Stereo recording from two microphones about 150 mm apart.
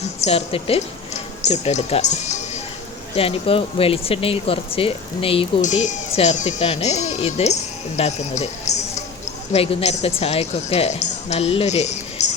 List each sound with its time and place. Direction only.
0.2 s speech: 40° left (ahead or behind)
3.2 s speech: 40° left (ahead or behind)
5.6 s speech: 55° left (ahead or behind)